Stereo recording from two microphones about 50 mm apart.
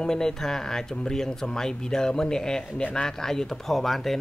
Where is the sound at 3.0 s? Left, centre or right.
Centre.